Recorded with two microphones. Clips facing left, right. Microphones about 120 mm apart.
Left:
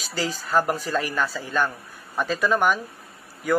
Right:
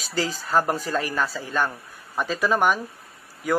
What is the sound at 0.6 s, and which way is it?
Speech, 35° right (ahead or behind).